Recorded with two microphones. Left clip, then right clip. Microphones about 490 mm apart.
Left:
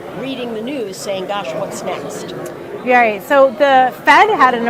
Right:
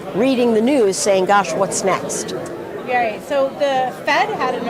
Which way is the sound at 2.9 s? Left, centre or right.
Left.